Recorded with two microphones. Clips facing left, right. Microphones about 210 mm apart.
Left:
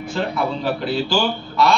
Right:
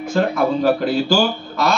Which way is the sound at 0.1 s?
45° right (ahead or behind).